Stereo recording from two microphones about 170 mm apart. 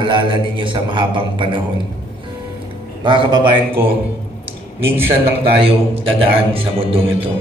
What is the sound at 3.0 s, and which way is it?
Speech, 30° right (ahead or behind).